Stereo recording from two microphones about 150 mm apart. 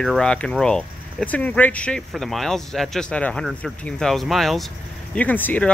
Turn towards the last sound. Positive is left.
turn(degrees=10)  # may be behind; listen again after turning